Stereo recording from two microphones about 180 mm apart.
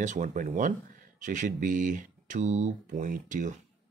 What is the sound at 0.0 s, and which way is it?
Speech, 45° right (ahead or behind).